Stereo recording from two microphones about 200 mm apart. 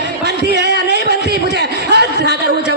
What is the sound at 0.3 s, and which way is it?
Music, 55° right (ahead or behind).